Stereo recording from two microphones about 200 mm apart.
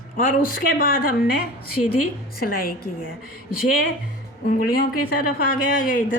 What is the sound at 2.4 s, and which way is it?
Speech, 45° left (ahead or behind).